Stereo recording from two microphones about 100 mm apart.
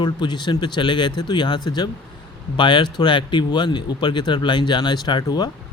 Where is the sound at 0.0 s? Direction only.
50° left (ahead or behind).